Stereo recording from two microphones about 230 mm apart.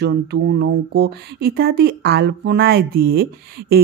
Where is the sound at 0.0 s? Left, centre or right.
Right.